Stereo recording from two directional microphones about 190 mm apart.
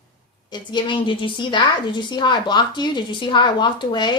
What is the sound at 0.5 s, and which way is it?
A woman's voice, 25° left (ahead or behind).